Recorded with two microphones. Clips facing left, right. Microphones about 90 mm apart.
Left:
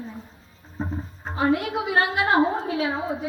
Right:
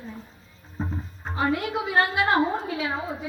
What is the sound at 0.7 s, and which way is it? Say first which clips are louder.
A woman's voice: left 2 dB; 10° left (ahead or behind).